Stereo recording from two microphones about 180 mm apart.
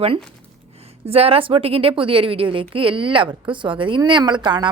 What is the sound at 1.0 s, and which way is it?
Speech, 35° right (ahead or behind).